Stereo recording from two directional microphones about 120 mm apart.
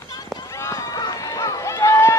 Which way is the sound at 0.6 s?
25° left (ahead or behind).